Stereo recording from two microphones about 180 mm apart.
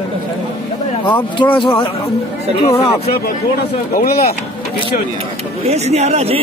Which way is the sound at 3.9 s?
55° left (ahead or behind).